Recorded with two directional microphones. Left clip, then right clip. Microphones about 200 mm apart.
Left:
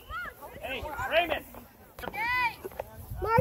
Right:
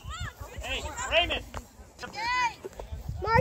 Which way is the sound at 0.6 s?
50° left (ahead or behind).